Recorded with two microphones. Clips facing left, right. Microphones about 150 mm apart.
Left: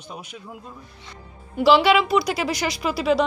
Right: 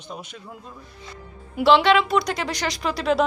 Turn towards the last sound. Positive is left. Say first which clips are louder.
# left 2 dB
turn(degrees=5)  # may be behind; listen again after turning